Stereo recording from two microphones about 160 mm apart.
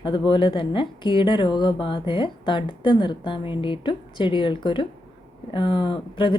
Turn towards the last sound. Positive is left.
turn(degrees=35)  # may be behind; listen again after turning